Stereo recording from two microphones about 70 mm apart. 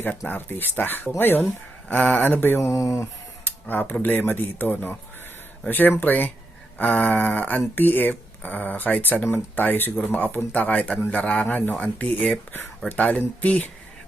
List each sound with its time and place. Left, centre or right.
0.3 s speech: left
1.9 s speech: centre
2.6 s speech: left
3.0 s speech: left